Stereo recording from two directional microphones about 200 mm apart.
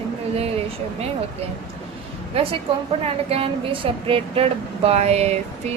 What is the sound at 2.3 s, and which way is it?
A woman's voice, 30° right (ahead or behind).